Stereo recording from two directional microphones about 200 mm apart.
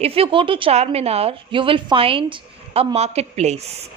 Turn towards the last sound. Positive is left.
turn(degrees=-30)  # may be behind; listen again after turning